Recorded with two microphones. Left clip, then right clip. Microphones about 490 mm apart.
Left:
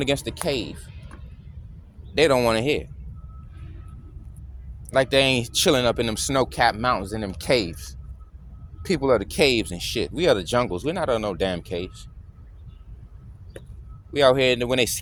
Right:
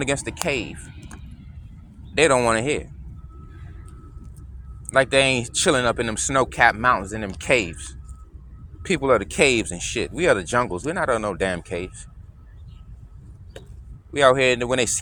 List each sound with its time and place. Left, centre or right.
0.0 s speech: left
2.1 s speech: left
4.9 s speech: left
8.8 s speech: left
14.1 s speech: left